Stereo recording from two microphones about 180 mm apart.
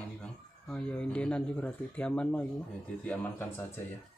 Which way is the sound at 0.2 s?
5° left (ahead or behind).